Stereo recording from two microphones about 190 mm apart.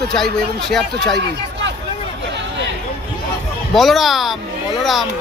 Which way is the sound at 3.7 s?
Centre (ahead or behind).